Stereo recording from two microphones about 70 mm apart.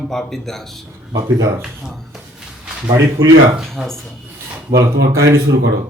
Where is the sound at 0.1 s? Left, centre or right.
Centre.